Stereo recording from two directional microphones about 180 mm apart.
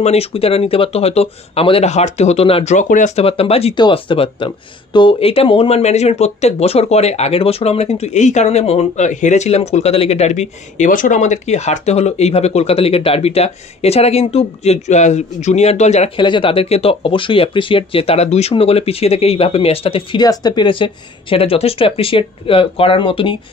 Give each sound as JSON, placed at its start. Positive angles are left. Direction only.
{"t": 0.0, "sound": "speech", "side_deg": 35}
{"t": 16.2, "sound": "speech", "side_deg": 25}